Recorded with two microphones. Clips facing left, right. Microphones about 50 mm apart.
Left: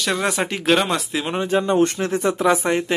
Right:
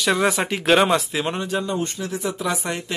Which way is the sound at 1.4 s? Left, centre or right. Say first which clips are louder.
Left 5 dB; left.